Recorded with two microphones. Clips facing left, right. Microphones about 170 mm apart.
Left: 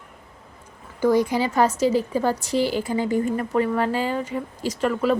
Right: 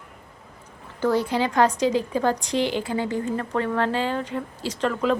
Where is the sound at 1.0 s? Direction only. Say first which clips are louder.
Left 3 dB; 10° left (ahead or behind).